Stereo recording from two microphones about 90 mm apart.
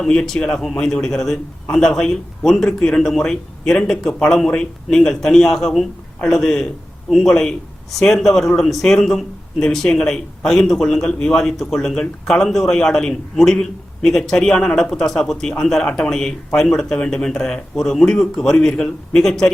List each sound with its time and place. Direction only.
0.0 s a man's voice: 5° left (ahead or behind)